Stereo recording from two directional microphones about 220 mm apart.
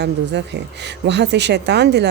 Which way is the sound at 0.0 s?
50° right (ahead or behind).